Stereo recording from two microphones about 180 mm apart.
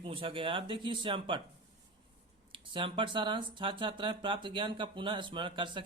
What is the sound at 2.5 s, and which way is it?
Speech, 30° right (ahead or behind).